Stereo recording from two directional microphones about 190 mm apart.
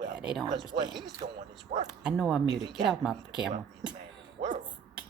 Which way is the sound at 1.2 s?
35° right (ahead or behind).